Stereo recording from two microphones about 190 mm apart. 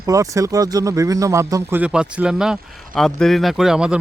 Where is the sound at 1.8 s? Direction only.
5° right (ahead or behind).